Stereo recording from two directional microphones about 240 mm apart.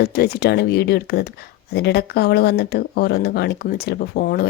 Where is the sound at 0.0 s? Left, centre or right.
Left.